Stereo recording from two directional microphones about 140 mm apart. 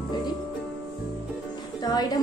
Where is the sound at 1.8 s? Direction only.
25° left (ahead or behind).